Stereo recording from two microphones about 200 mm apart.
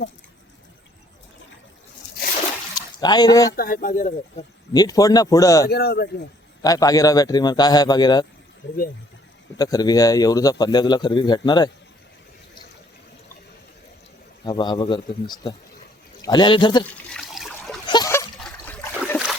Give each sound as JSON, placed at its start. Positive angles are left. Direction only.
{"t": 2.7, "sound": "a sound", "side_deg": 20}
{"t": 3.5, "sound": "speech", "side_deg": 45}
{"t": 4.7, "sound": "speech", "side_deg": 20}
{"t": 5.6, "sound": "speech", "side_deg": 55}
{"t": 6.6, "sound": "a man's voice", "side_deg": 20}
{"t": 8.6, "sound": "speech", "side_deg": 65}
{"t": 9.6, "sound": "a man's voice", "side_deg": 20}
{"t": 14.4, "sound": "a man's voice", "side_deg": 20}
{"t": 16.9, "sound": "water", "side_deg": 5}
{"t": 17.8, "sound": "splash", "side_deg": 20}
{"t": 18.3, "sound": "trickle", "side_deg": 5}